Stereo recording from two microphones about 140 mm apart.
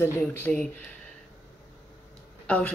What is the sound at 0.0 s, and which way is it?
Speech, 15° left (ahead or behind).